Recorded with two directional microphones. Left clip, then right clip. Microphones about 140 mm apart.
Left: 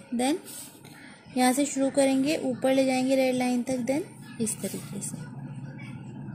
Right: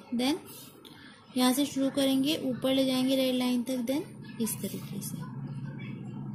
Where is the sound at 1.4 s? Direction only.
20° left (ahead or behind).